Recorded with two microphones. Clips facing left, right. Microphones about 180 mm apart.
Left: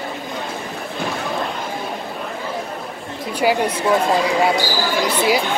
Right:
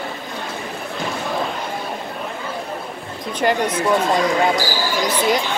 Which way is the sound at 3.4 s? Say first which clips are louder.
Left 1 dB; 10° left (ahead or behind).